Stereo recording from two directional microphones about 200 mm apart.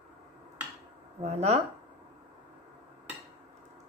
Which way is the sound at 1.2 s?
30° right (ahead or behind).